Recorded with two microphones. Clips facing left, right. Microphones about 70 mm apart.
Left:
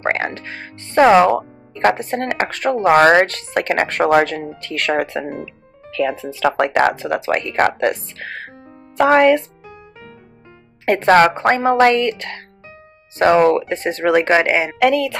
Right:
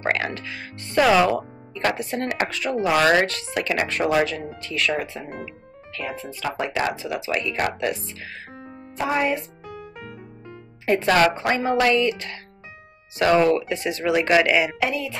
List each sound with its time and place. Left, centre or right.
0.0 s speech: left
6.5 s speech: left
8.9 s speech: left
10.9 s speech: left
13.2 s speech: left
14.8 s speech: left